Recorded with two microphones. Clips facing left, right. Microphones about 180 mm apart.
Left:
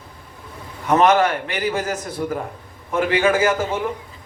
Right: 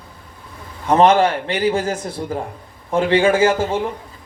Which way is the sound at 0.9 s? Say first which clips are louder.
Right 2 dB; 30° right (ahead or behind).